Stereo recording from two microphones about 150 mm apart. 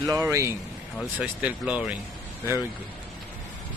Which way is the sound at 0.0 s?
20° right (ahead or behind).